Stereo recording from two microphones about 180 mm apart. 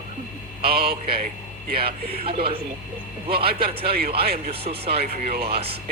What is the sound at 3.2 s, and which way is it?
Speech, 60° right (ahead or behind).